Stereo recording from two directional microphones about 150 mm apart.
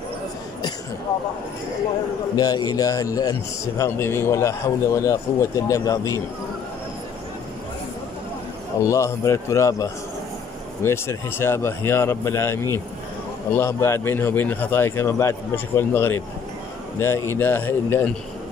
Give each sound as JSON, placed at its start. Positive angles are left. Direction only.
{"t": 2.3, "sound": "a man's voice", "side_deg": 25}
{"t": 8.8, "sound": "a man's voice", "side_deg": 20}
{"t": 13.6, "sound": "speech", "side_deg": 15}